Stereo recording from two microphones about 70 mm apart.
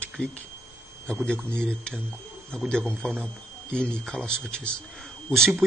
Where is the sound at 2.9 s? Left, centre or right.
Right.